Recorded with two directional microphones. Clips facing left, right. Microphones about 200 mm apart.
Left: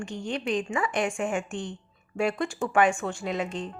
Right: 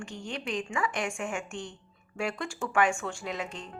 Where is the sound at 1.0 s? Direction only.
35° left (ahead or behind).